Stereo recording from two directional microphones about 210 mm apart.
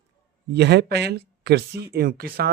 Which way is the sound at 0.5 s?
55° right (ahead or behind).